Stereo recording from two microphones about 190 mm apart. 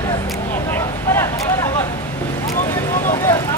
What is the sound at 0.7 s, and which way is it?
Vehicle, 15° left (ahead or behind).